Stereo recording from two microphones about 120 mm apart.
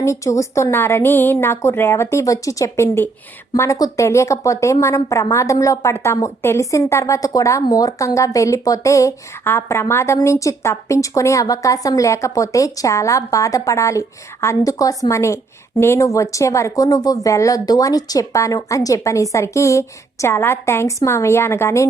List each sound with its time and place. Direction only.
0.0 s speech: 25° left (ahead or behind)